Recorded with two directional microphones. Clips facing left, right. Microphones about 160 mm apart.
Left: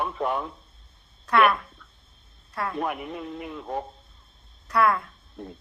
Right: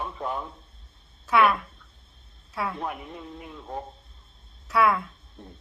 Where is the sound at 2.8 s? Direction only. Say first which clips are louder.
Left 5 dB; 80° left.